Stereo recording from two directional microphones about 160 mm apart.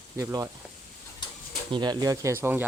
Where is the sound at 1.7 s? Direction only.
25° right (ahead or behind).